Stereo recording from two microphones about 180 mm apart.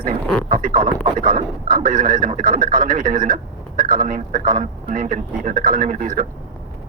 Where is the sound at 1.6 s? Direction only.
25° right (ahead or behind).